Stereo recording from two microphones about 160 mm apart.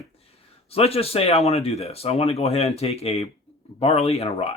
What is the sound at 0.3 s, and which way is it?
A man's voice, 40° left (ahead or behind).